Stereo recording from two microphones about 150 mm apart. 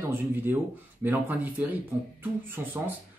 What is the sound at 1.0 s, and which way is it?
Speech, 10° right (ahead or behind).